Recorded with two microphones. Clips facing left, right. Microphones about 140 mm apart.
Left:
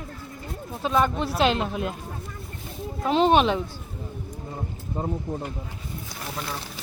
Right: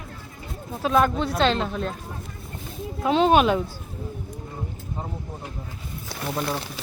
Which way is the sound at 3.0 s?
Centre (ahead or behind).